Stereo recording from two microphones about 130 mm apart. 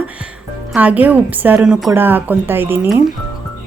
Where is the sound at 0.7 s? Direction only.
10° right (ahead or behind).